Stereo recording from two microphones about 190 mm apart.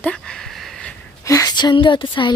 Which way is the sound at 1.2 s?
20° left (ahead or behind).